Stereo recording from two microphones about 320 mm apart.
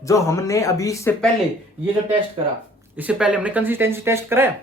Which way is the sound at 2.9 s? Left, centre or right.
Centre.